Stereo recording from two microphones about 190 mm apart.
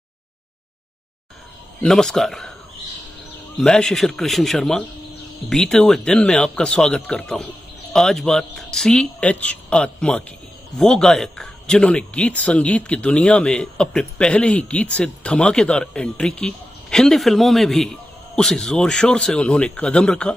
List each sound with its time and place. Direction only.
1.8 s speech: 5° left (ahead or behind)
3.5 s speech: 5° left (ahead or behind)